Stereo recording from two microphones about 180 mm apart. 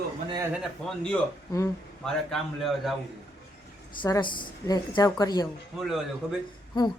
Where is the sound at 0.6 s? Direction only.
5° left (ahead or behind).